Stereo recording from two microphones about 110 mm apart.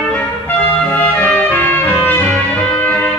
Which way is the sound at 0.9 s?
20° left (ahead or behind).